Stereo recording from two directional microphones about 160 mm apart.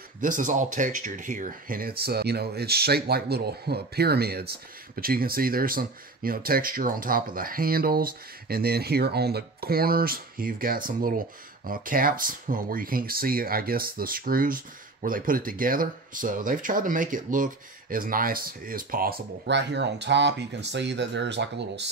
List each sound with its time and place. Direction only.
0.2 s speech: 55° right (ahead or behind); by 21.9 s 90° right